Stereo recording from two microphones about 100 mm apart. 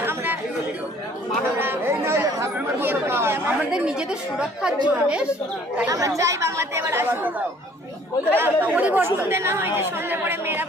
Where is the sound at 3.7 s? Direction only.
5° right (ahead or behind).